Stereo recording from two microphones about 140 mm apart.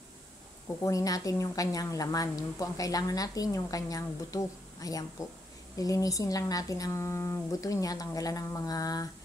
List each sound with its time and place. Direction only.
0.8 s a woman's voice: 25° left (ahead or behind)